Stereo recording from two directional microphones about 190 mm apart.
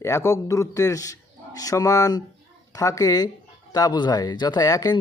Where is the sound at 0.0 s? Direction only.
15° left (ahead or behind).